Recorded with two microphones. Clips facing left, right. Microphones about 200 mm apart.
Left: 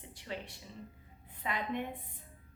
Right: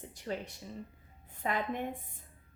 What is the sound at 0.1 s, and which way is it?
A woman's voice, 45° right (ahead or behind).